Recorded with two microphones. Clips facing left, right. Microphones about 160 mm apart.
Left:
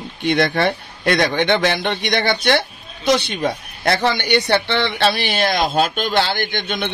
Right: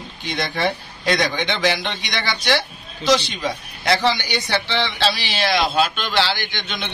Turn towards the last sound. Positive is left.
turn(degrees=50)  # may be behind; listen again after turning